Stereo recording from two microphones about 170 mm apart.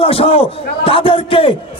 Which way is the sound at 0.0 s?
35° left (ahead or behind).